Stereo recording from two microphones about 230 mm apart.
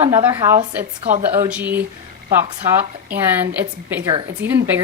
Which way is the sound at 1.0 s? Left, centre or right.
Right.